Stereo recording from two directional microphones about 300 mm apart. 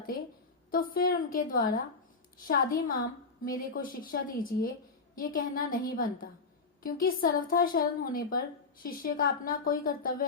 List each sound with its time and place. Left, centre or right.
0.7 s a woman's voice: left